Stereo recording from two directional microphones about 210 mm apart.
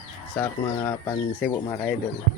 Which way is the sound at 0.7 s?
10° left (ahead or behind).